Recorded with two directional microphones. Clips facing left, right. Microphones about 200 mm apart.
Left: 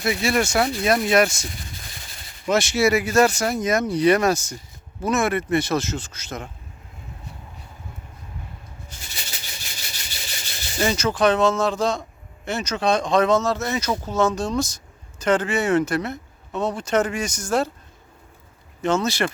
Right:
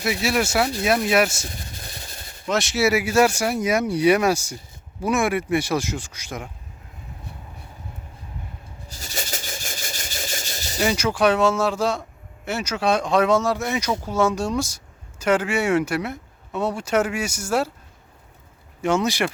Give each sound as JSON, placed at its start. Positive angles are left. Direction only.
{"t": 0.0, "sound": "speech", "side_deg": -5}
{"t": 2.5, "sound": "speech", "side_deg": 0}
{"t": 8.9, "sound": "rub", "side_deg": -40}
{"t": 10.8, "sound": "speech", "side_deg": -10}
{"t": 18.8, "sound": "speech", "side_deg": -15}